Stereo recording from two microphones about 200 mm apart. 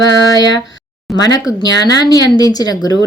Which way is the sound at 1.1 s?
20° left (ahead or behind).